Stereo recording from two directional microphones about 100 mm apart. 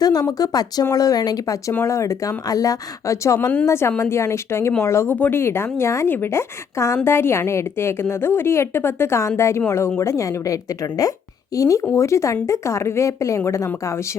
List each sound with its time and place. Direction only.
0.0 s speech: 40° left (ahead or behind)
1.7 s a woman's voice: 30° left (ahead or behind)